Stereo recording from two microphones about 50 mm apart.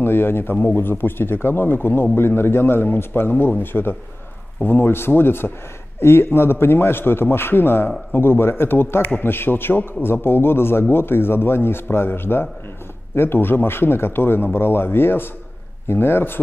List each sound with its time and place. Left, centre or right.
0.0 s a man's voice: left